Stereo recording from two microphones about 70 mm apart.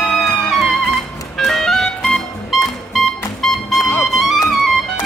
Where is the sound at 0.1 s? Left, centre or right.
Centre.